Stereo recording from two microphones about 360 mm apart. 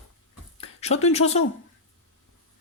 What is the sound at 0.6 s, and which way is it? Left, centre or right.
Speech, centre.